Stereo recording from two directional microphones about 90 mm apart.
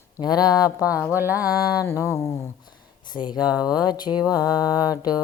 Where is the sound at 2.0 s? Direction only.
30° left (ahead or behind).